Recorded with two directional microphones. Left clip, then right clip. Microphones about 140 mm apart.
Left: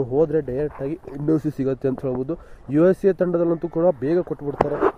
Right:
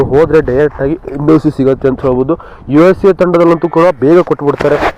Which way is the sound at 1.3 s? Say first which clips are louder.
Right 14 dB; 10° left (ahead or behind).